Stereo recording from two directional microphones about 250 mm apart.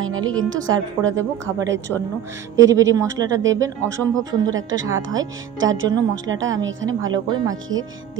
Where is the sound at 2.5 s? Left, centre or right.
Centre.